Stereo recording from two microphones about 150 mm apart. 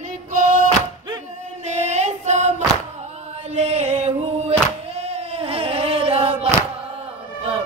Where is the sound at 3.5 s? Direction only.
45° right (ahead or behind).